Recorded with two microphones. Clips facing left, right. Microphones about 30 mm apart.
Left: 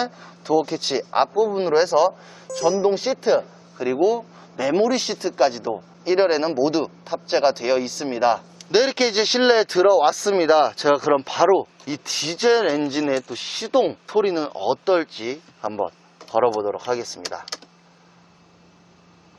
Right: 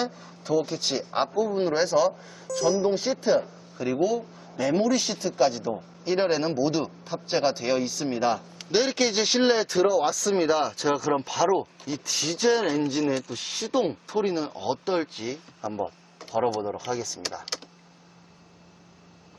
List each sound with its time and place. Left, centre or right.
0.1 s a man's voice: left
2.8 s a man's voice: left
16.6 s a man's voice: centre
16.9 s speech: left
17.4 s speech: centre